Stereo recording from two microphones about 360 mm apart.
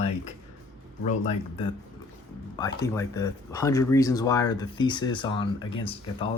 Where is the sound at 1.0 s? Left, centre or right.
Centre.